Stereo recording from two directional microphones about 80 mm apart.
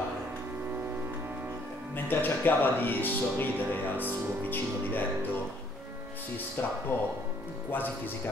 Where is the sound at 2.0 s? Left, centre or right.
Left.